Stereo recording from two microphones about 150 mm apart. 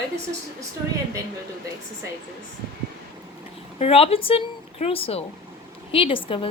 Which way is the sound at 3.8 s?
40° left (ahead or behind).